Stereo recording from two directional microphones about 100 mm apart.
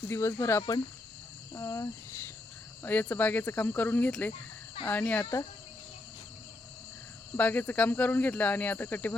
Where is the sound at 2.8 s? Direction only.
20° left (ahead or behind).